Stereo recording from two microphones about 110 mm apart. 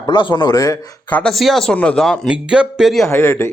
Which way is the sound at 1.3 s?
Centre (ahead or behind).